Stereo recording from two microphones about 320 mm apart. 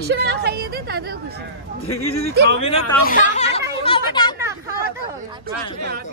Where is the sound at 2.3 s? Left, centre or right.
Right.